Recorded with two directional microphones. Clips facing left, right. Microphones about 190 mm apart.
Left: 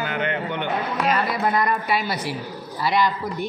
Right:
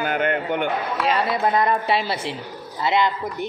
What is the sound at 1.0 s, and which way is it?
A man's voice, 25° right (ahead or behind).